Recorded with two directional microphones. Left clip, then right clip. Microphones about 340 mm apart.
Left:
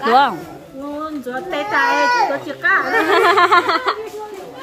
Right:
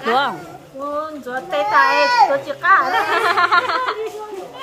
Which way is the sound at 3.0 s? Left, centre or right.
Left.